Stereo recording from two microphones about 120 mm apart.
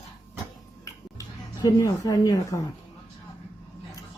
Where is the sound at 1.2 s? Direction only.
30° left (ahead or behind).